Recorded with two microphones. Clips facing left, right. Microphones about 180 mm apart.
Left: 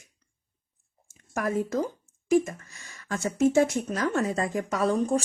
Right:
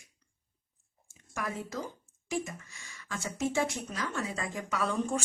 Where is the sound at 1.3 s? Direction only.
45° left (ahead or behind).